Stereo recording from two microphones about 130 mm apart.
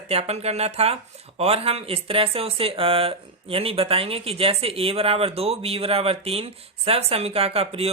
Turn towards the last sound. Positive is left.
turn(degrees=-50)  # may be behind; listen again after turning